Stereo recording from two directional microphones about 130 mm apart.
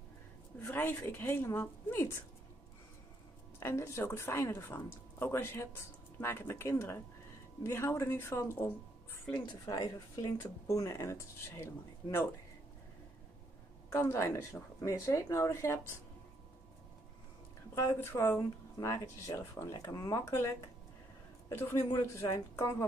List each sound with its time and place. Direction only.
0.6 s speech: 15° left (ahead or behind)
3.5 s a woman's voice: 20° left (ahead or behind)
9.5 s speech: 30° left (ahead or behind)
13.8 s speech: 20° left (ahead or behind)
17.7 s speech: 20° left (ahead or behind)